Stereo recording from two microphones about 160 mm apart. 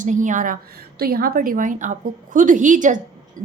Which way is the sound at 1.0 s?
70° right (ahead or behind).